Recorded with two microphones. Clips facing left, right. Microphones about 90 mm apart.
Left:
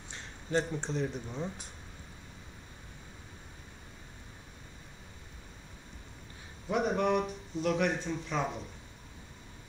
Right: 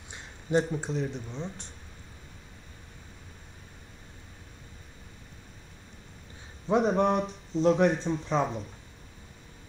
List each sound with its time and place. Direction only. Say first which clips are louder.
0.1 s a sound: right 5 dB; 15° right (ahead or behind)
0.7 s speech: right 2 dB; 5° right (ahead or behind)
6.7 s speech: right 5 dB; 30° right (ahead or behind)